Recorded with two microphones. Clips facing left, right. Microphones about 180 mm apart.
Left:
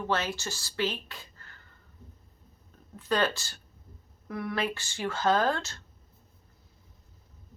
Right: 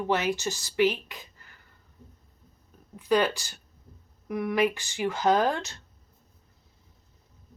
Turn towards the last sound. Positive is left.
turn(degrees=-15)  # may be behind; listen again after turning